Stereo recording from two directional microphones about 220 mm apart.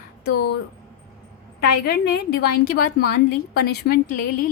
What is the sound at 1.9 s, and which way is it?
Speech, 45° left (ahead or behind).